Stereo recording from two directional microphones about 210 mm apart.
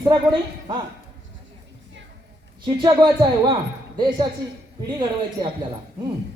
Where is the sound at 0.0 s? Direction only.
20° right (ahead or behind).